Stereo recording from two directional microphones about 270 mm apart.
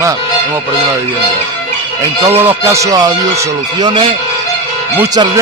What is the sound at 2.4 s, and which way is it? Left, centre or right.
Speech, centre.